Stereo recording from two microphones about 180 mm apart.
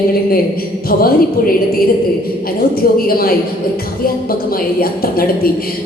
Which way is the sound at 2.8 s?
55° left (ahead or behind).